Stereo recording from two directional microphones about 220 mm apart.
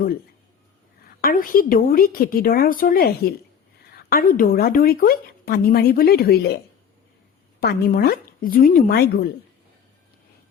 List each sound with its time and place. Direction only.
1.0 s a woman's voice: 40° left (ahead or behind)
7.6 s a woman's voice: 45° left (ahead or behind)